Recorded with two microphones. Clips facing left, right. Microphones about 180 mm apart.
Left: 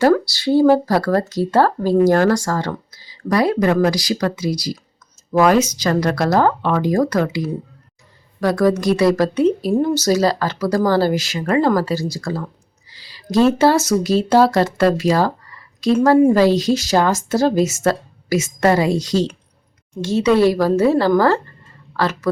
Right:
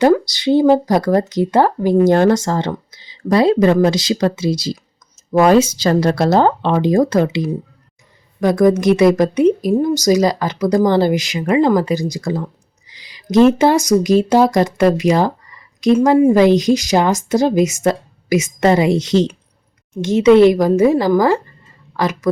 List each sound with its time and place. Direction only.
0.0 s a woman's voice: 20° right (ahead or behind)